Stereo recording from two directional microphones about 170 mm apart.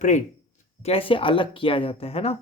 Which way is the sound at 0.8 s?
35° left (ahead or behind).